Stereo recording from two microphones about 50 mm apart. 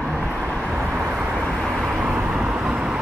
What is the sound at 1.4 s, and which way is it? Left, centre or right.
Vehicle, centre.